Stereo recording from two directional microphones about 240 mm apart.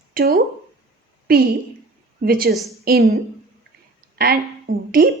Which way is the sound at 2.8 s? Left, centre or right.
Right.